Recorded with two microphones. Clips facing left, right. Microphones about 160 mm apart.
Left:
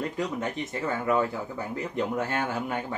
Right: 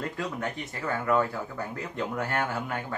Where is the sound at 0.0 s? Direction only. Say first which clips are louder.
Left 2 dB; 20° left (ahead or behind).